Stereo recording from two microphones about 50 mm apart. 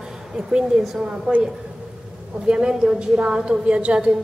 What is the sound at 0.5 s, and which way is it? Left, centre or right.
Speech, centre.